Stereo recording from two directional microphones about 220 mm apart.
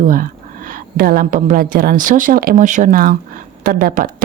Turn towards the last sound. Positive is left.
turn(degrees=-40)  # may be behind; listen again after turning